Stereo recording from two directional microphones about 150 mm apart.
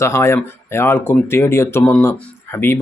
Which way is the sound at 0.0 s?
15° left (ahead or behind).